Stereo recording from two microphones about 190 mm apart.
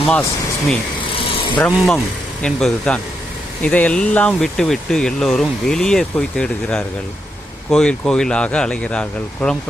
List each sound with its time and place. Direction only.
1.1 s vehicle: 25° left (ahead or behind)
1.5 s speech: 5° left (ahead or behind)